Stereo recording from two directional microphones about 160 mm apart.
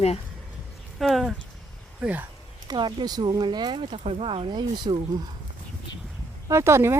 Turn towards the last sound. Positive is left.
turn(degrees=-15)  # may be behind; listen again after turning